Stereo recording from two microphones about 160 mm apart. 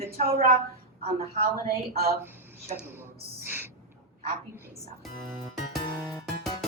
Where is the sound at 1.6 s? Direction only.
70° right (ahead or behind).